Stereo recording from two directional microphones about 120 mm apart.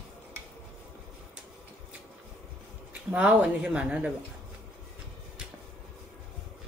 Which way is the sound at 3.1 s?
10° right (ahead or behind).